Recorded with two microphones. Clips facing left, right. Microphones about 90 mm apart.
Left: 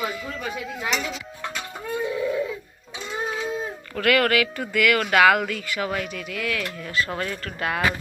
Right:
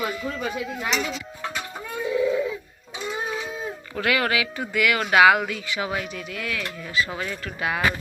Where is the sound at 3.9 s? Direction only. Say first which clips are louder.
Left 3 dB; 15° right (ahead or behind).